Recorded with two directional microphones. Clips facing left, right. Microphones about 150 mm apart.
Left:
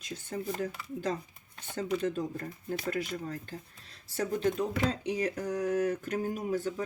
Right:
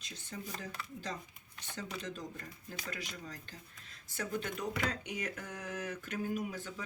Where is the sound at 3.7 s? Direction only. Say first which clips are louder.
Left 6 dB; 35° left (ahead or behind).